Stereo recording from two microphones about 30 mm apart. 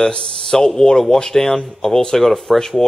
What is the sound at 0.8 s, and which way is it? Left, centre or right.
Speech, left.